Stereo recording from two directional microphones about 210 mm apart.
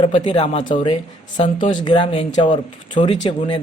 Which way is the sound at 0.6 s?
35° left (ahead or behind).